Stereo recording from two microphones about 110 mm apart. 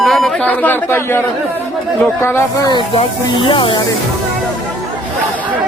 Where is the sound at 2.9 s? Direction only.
55° left (ahead or behind).